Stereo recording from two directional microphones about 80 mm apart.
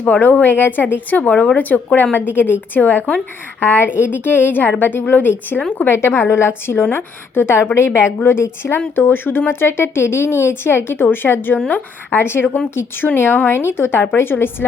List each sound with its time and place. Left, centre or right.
0.0 s a woman's voice: left